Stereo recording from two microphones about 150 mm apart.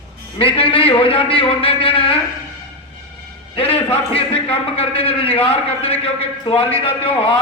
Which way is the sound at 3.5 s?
40° left (ahead or behind).